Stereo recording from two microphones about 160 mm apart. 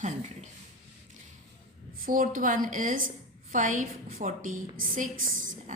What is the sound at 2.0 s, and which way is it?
A woman's voice, 60° right (ahead or behind).